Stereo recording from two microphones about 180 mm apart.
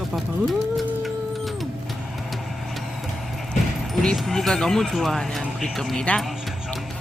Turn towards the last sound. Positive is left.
turn(degrees=5)  # may be behind; listen again after turning